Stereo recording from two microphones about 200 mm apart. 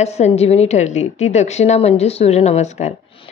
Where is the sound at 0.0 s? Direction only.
35° left (ahead or behind).